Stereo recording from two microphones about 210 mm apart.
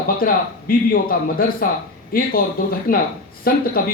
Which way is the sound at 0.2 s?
45° left (ahead or behind).